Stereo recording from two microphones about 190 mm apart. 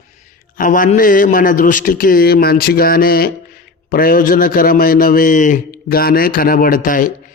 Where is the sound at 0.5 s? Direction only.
45° left (ahead or behind).